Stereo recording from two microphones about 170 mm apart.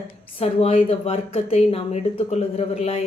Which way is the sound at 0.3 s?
35° left (ahead or behind).